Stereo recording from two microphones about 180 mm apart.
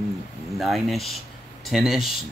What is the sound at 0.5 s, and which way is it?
Speech, centre (ahead or behind).